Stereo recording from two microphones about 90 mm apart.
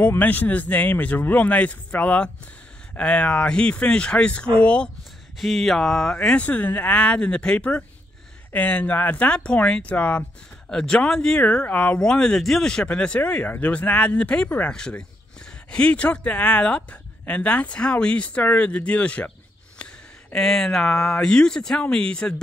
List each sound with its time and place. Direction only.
0.2 s speech: 20° left (ahead or behind)
5.4 s speech: centre (ahead or behind)